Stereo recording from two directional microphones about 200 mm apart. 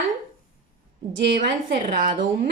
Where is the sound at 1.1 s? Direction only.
55° right (ahead or behind).